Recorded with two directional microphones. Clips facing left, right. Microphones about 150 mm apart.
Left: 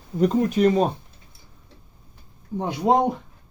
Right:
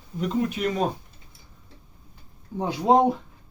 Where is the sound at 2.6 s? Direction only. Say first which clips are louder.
Left 2 dB; 20° left (ahead or behind).